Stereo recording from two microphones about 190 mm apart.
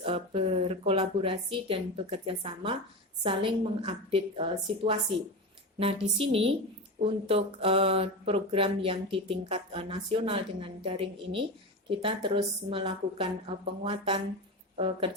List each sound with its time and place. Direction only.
0.0 s a woman's voice: 30° right (ahead or behind)